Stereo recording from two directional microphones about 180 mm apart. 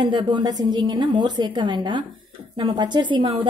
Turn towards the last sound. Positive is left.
turn(degrees=-25)  # may be behind; listen again after turning